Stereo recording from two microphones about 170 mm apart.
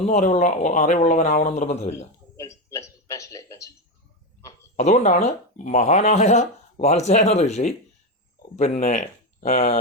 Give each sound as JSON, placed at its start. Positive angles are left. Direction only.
{"t": 0.0, "sound": "speech", "side_deg": 40}
{"t": 2.3, "sound": "a sound", "side_deg": 15}
{"t": 4.8, "sound": "speech", "side_deg": 40}